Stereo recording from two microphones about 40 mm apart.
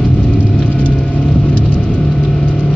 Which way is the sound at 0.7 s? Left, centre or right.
Left.